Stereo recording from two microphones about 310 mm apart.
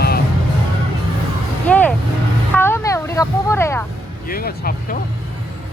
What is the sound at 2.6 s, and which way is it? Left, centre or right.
Vehicle, centre.